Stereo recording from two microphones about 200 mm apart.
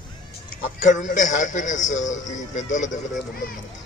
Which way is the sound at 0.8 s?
40° left (ahead or behind).